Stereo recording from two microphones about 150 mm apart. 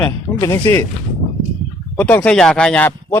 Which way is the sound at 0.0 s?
25° left (ahead or behind).